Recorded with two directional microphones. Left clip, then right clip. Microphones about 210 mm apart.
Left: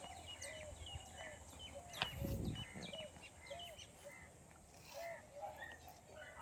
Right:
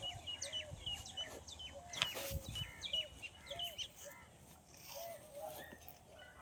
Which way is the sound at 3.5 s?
50° left (ahead or behind).